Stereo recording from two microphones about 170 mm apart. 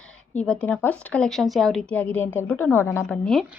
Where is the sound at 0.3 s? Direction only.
5° left (ahead or behind).